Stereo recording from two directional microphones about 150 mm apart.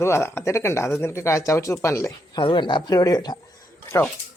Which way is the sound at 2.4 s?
30° left (ahead or behind).